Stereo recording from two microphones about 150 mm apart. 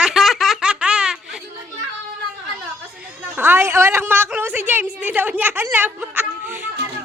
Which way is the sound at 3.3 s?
15° right (ahead or behind).